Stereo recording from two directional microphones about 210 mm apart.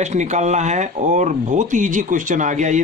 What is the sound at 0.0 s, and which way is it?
Speech, 35° right (ahead or behind).